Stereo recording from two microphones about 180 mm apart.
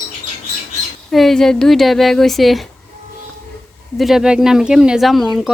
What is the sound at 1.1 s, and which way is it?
Speech, centre (ahead or behind).